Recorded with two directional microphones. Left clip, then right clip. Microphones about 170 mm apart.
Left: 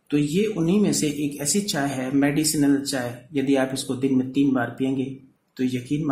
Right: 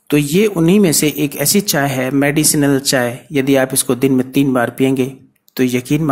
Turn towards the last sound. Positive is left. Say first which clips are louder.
# right 10 dB
turn(degrees=-40)  # may be behind; listen again after turning